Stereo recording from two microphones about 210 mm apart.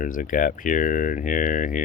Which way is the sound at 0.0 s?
40° left (ahead or behind).